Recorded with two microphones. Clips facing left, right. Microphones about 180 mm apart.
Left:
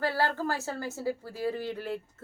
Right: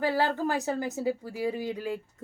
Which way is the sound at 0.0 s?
15° right (ahead or behind).